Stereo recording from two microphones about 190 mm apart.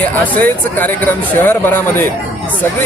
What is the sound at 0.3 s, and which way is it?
Speech, 10° left (ahead or behind).